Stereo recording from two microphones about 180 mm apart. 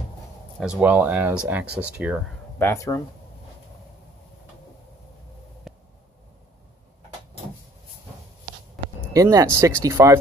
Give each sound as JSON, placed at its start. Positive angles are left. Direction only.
{"t": 0.6, "sound": "speech", "side_deg": -5}
{"t": 2.6, "sound": "speech", "side_deg": 15}
{"t": 5.7, "sound": "a sound", "side_deg": 0}
{"t": 9.1, "sound": "speech", "side_deg": -20}